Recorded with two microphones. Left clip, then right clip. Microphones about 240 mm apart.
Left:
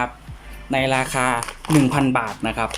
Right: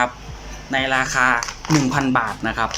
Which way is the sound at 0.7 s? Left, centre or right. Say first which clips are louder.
Right 1 dB; centre.